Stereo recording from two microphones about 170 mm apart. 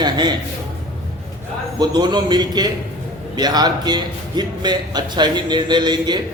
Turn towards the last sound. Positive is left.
turn(degrees=-25)  # may be behind; listen again after turning